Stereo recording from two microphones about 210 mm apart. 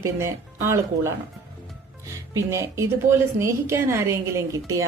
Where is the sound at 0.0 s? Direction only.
15° right (ahead or behind).